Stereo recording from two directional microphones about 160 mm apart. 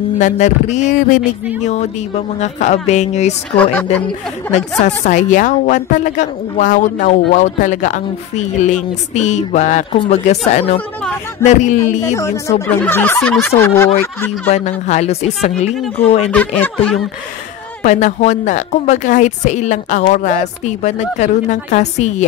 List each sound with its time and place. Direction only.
0.2 s a woman's voice: 45° left (ahead or behind)
4.5 s a woman's voice: 45° left (ahead or behind)
12.1 s speech: 20° left (ahead or behind)
14.5 s a woman's voice: 45° left (ahead or behind)
16.3 s speech: 10° left (ahead or behind)
17.8 s a woman's voice: 45° left (ahead or behind)